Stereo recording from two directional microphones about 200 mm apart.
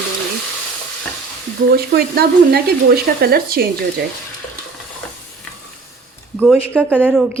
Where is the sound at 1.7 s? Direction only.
50° right (ahead or behind).